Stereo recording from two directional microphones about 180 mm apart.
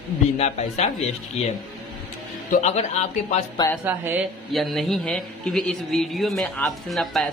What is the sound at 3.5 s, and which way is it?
Speech, 15° left (ahead or behind).